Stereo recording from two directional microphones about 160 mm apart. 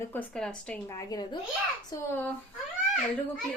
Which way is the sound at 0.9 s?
20° left (ahead or behind).